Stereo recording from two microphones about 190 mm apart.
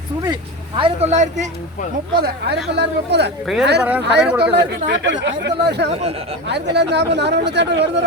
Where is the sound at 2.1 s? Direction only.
55° right (ahead or behind).